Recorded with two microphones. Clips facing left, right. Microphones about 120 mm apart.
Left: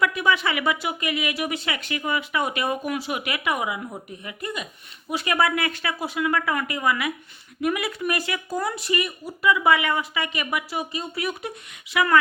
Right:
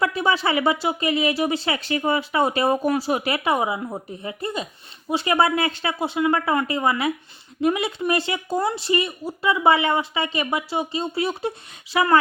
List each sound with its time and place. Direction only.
0.0 s speech: 30° right (ahead or behind)